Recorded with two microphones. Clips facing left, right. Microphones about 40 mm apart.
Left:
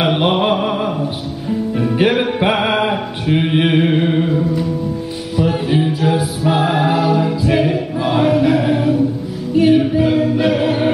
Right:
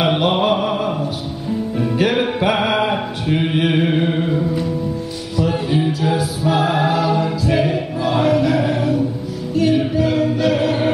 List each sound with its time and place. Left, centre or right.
0.0 s mantra: centre
2.5 s mantra: centre
5.4 s choir: centre
9.6 s music: centre
9.9 s choir: centre